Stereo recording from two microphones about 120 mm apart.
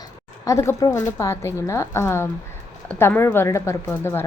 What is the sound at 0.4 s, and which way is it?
A woman's voice, 25° left (ahead or behind).